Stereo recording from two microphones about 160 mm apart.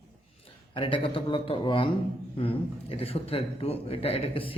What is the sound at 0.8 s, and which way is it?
A man's voice, 35° left (ahead or behind).